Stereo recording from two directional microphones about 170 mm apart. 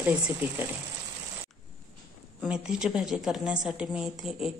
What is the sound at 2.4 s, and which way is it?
Speech, 5° right (ahead or behind).